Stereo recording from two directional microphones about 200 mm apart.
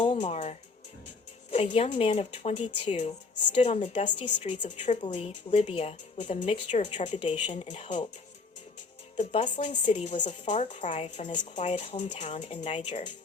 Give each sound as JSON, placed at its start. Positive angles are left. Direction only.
{"t": 0.0, "sound": "speech", "side_deg": 30}
{"t": 9.1, "sound": "speech", "side_deg": 35}